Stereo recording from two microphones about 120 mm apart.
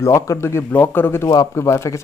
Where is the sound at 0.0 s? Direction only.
25° left (ahead or behind).